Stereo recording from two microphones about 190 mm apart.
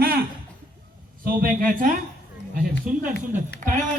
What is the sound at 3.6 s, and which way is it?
Speech, 45° right (ahead or behind).